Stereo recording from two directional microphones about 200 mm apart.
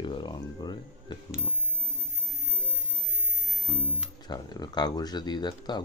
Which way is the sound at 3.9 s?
20° left (ahead or behind).